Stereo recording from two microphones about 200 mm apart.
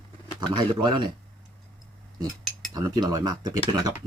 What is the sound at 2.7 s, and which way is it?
Speech, 20° right (ahead or behind).